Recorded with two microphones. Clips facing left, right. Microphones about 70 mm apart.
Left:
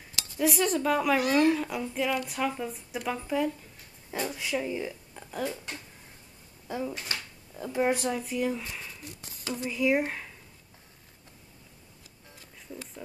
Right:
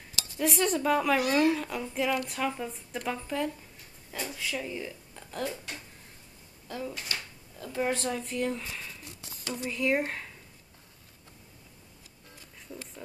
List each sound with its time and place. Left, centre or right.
0.4 s a woman's voice: centre
4.1 s speech: left
6.7 s a woman's voice: centre